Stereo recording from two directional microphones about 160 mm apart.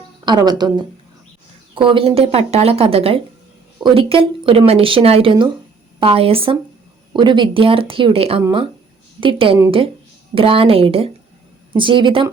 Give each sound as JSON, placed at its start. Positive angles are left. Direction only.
{"t": 0.3, "sound": "speech", "side_deg": -25}